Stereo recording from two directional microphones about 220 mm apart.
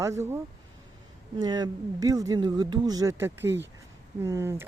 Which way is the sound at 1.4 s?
15° right (ahead or behind).